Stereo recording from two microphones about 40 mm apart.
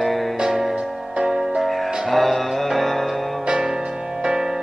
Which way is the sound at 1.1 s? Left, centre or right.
Centre.